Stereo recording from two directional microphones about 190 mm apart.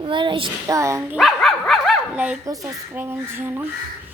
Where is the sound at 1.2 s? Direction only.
Centre (ahead or behind).